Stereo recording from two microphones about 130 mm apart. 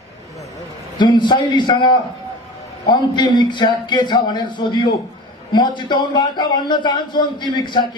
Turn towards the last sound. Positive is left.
turn(degrees=35)  # may be behind; listen again after turning